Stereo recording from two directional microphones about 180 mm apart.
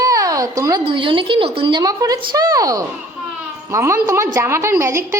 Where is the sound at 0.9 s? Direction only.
30° right (ahead or behind).